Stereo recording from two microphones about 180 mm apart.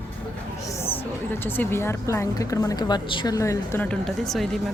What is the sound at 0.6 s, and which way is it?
A woman's voice, 15° left (ahead or behind).